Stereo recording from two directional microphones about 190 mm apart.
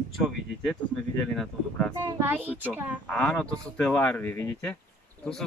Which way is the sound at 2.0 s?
10° right (ahead or behind).